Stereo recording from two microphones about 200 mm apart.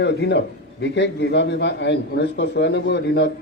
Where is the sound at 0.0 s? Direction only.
60° left (ahead or behind).